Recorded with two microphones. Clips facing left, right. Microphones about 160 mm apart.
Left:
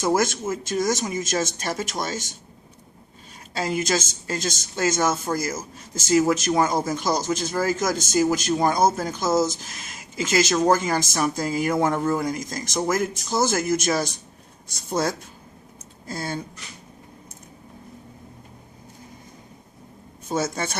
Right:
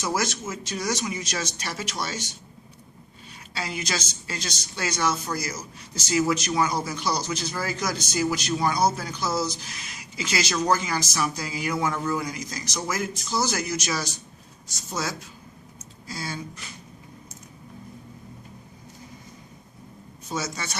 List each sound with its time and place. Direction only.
0.0 s speech: 50° left (ahead or behind)
3.5 s speech: 45° left (ahead or behind)
20.2 s speech: 55° left (ahead or behind)